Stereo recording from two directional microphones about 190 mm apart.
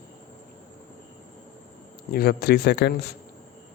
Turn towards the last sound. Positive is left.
turn(degrees=60)  # may be behind; listen again after turning